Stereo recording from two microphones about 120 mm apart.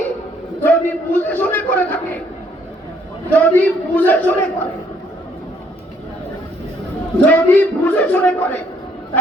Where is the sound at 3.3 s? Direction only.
15° left (ahead or behind).